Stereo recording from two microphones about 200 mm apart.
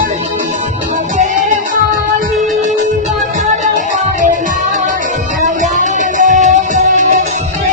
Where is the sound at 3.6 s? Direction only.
40° right (ahead or behind).